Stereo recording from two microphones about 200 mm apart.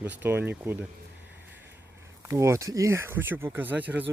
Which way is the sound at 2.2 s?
15° right (ahead or behind).